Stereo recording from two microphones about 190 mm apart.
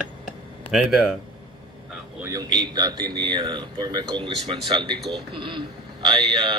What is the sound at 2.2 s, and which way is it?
Speech, 20° right (ahead or behind).